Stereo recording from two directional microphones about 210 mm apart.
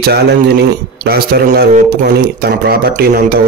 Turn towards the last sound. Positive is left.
turn(degrees=-45)  # may be behind; listen again after turning